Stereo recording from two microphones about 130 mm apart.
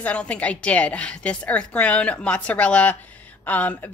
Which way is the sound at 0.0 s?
10° left (ahead or behind).